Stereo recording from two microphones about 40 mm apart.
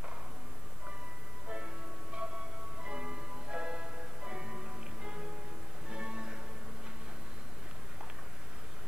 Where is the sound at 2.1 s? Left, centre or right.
Right.